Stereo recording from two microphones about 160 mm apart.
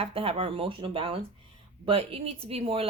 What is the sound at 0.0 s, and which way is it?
Speech, 35° right (ahead or behind).